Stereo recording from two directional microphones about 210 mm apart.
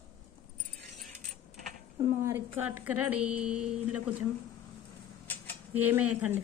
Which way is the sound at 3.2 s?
90° right.